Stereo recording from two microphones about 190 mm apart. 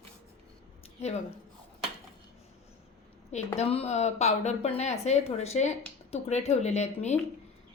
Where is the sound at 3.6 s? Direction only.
30° left (ahead or behind).